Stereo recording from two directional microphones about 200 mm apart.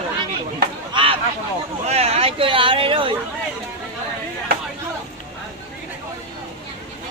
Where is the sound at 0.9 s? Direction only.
25° right (ahead or behind).